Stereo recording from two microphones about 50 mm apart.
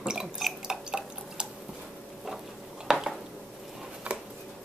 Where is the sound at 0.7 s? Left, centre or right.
Centre.